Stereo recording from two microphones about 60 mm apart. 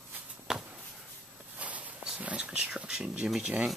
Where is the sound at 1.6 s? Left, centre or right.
Right.